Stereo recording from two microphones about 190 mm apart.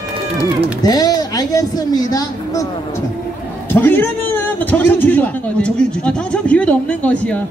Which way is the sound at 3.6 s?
10° left (ahead or behind).